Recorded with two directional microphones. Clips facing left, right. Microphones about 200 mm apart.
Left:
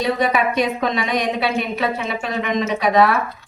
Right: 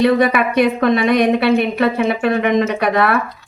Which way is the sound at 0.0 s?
60° right (ahead or behind).